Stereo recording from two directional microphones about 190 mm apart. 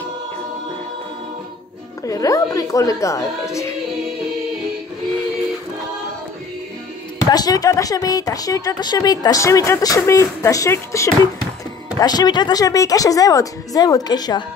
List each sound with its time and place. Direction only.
2.0 s speech: 20° left (ahead or behind)
7.2 s speech: 20° left (ahead or behind)